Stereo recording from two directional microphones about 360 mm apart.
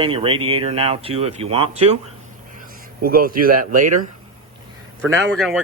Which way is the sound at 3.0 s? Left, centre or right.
Right.